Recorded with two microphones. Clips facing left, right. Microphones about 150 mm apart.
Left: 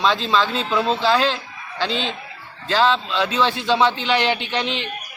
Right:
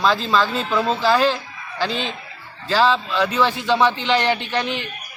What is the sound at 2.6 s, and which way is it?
Speech, 10° right (ahead or behind).